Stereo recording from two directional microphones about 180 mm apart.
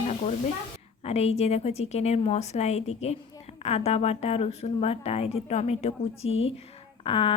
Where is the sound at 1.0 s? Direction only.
35° left (ahead or behind).